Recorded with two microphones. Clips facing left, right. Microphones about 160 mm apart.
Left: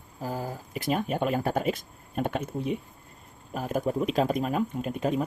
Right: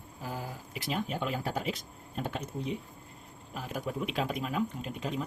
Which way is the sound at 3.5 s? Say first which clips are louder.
Left 8 dB; 45° left (ahead or behind).